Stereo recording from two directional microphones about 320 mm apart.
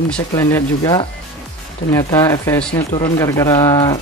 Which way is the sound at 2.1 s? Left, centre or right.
Centre.